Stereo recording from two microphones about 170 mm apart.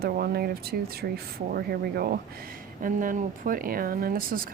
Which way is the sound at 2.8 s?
55° right (ahead or behind).